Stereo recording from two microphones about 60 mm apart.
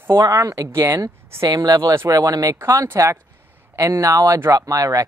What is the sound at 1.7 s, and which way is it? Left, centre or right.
Speech, right.